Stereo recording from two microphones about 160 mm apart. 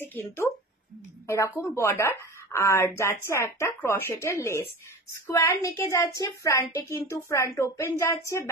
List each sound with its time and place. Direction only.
0.0 s a woman's voice: 15° left (ahead or behind)